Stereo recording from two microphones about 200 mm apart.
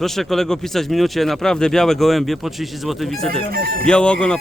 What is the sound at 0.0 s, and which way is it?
Speech, centre (ahead or behind).